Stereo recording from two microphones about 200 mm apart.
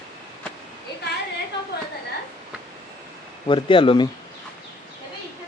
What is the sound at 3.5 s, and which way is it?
Speech, 25° left (ahead or behind).